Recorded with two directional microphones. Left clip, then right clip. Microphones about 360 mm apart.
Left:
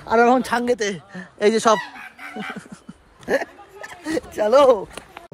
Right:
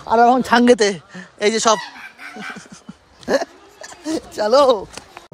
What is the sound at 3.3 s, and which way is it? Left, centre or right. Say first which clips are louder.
Speech: right 3 dB; centre.